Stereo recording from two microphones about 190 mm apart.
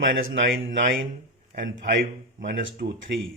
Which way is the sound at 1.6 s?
50° right (ahead or behind).